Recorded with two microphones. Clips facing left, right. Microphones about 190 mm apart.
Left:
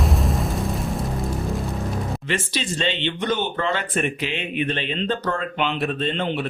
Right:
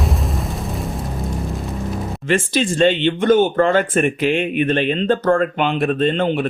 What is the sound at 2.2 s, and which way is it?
Speech, 50° right (ahead or behind).